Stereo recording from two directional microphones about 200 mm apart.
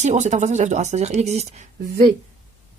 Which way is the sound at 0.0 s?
35° right (ahead or behind).